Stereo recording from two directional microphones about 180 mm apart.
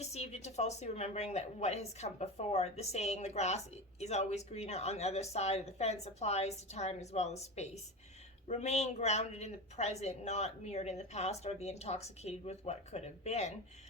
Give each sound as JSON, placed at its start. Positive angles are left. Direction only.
{"t": 0.0, "sound": "a woman's voice", "side_deg": 35}